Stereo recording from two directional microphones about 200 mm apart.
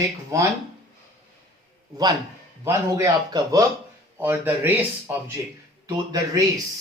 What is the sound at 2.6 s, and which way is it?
Speech, 15° right (ahead or behind).